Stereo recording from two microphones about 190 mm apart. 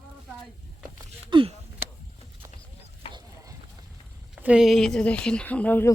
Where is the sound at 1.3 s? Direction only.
25° right (ahead or behind).